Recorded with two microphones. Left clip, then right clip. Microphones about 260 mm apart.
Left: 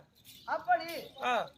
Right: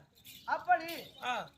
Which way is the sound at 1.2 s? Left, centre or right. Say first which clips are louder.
Left 6 dB; centre.